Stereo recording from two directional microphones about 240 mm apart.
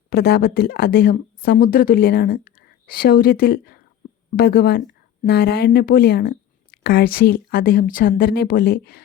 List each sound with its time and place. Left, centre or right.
0.1 s speech: left